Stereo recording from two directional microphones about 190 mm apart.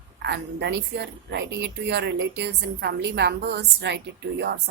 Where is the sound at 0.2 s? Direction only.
65° right (ahead or behind).